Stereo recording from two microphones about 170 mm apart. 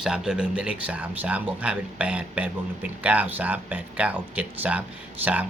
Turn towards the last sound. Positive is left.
turn(degrees=-10)  # may be behind; listen again after turning